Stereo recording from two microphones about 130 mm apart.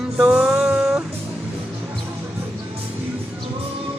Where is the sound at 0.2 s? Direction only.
5° right (ahead or behind).